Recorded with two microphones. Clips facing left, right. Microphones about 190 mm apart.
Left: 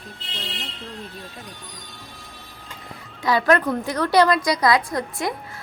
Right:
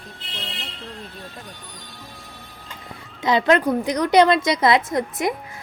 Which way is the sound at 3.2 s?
20° right (ahead or behind).